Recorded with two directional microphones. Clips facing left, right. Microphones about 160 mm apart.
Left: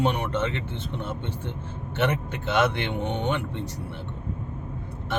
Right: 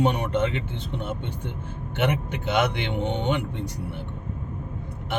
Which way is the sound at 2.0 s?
15° right (ahead or behind).